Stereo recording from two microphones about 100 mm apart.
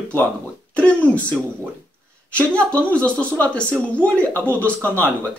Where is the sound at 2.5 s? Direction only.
15° left (ahead or behind).